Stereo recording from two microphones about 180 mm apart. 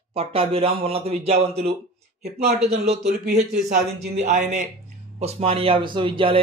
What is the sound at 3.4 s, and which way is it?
Speech, 65° right (ahead or behind).